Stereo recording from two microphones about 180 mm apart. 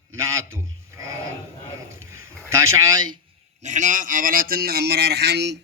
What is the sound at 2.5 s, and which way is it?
Speech, 15° right (ahead or behind).